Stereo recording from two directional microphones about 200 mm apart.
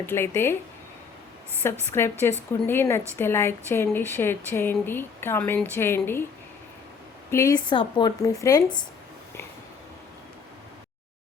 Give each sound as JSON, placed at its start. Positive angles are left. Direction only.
{"t": 0.0, "sound": "speech", "side_deg": 10}
{"t": 1.6, "sound": "speech", "side_deg": 10}
{"t": 7.3, "sound": "speech", "side_deg": 15}